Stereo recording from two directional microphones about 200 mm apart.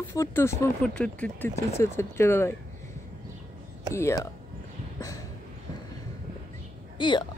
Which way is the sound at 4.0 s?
15° left (ahead or behind).